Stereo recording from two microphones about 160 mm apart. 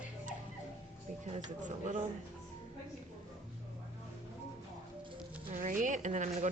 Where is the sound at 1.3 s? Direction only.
50° right (ahead or behind).